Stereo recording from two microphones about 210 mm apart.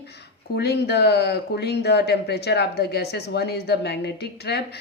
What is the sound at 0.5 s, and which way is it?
Speech, 50° left (ahead or behind).